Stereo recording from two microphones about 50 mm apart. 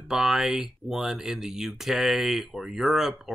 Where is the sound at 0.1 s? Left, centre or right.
Centre.